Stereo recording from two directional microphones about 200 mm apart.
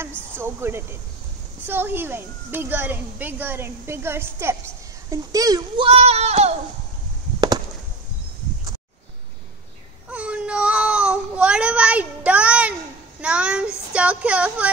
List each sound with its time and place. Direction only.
0.4 s a child's voice: 10° right (ahead or behind)
5.9 s speech: 30° right (ahead or behind)
7.3 s chop: 20° right (ahead or behind)
10.0 s baby cry: 5° right (ahead or behind)
13.2 s speech: 5° right (ahead or behind)